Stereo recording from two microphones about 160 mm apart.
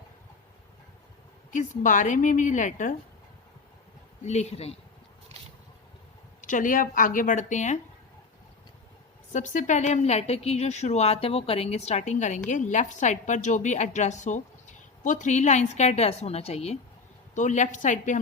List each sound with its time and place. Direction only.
1.8 s a woman's voice: 55° left (ahead or behind)
4.3 s speech: 45° left (ahead or behind)
5.3 s a sound: 40° right (ahead or behind)
6.4 s a woman's voice: 55° left (ahead or behind)
9.3 s a woman's voice: 50° left (ahead or behind)
17.3 s a woman's voice: 50° left (ahead or behind)